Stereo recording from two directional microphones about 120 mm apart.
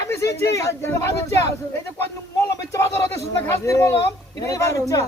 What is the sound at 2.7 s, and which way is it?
Speech, 20° left (ahead or behind).